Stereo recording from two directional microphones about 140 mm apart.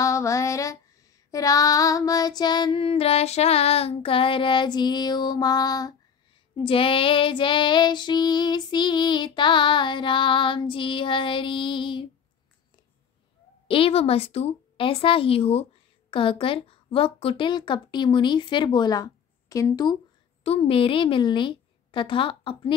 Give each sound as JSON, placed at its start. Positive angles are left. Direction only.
{"t": 0.0, "sound": "female singing", "side_deg": 20}
{"t": 6.5, "sound": "female singing", "side_deg": 40}
{"t": 13.7, "sound": "speech", "side_deg": 40}
{"t": 16.1, "sound": "female singing", "side_deg": 40}
{"t": 20.4, "sound": "a woman's voice", "side_deg": 45}